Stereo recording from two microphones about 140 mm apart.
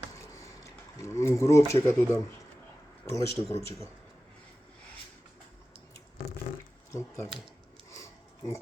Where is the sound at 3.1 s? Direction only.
25° left (ahead or behind).